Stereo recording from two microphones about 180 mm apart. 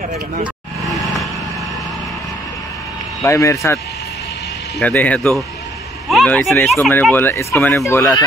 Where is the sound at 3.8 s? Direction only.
65° left (ahead or behind).